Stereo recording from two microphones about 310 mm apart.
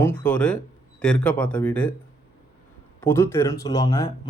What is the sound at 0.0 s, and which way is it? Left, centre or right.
Speech, centre.